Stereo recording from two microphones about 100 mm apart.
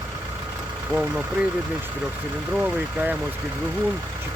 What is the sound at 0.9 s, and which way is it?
Speech, 15° right (ahead or behind).